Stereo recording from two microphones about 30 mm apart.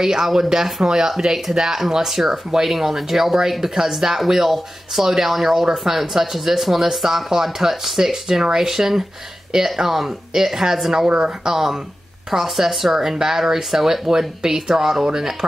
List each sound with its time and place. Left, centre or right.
0.0 s speech: centre
9.8 s speech: centre
11.1 s speech: right
11.5 s speech: centre
12.7 s speech: centre